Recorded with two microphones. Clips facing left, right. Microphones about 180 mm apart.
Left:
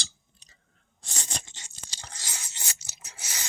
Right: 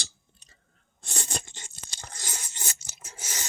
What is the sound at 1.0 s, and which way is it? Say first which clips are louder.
Tearing: right 4 dB; 55° right (ahead or behind).